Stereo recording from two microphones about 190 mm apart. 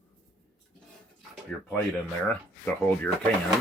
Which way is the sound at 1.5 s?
5° left (ahead or behind).